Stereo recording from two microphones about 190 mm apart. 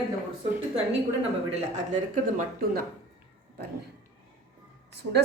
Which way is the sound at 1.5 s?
40° right (ahead or behind).